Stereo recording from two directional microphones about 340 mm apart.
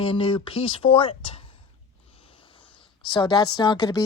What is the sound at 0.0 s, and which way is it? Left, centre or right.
A woman's voice, centre.